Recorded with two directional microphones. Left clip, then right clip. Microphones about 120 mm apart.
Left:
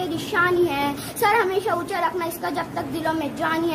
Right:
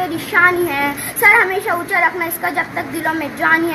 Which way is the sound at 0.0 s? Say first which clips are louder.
Right 8 dB; 20° left (ahead or behind).